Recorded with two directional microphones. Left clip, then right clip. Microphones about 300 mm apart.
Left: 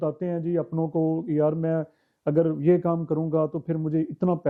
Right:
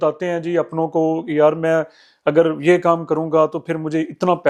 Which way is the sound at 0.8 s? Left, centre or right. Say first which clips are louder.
Right 7 dB; right.